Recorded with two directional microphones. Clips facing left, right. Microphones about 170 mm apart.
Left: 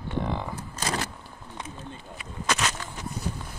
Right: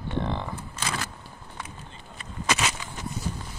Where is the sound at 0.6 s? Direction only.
40° left (ahead or behind).